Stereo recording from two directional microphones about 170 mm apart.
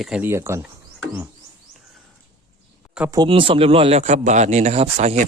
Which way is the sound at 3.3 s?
30° right (ahead or behind).